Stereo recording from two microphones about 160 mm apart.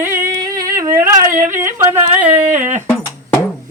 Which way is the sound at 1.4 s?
15° right (ahead or behind).